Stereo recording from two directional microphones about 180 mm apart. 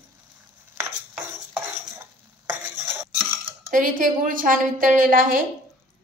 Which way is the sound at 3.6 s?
50° right (ahead or behind).